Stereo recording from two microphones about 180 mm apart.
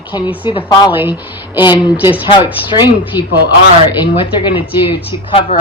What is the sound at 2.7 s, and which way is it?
Speech, 25° left (ahead or behind).